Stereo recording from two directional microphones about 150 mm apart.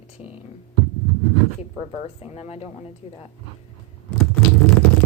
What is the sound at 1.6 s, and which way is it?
Speech, 40° left (ahead or behind).